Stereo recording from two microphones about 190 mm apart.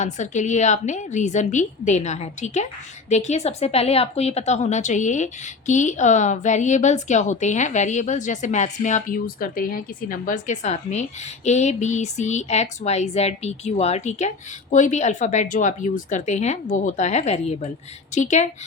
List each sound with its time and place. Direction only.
0.0 s a woman's voice: 40° left (ahead or behind)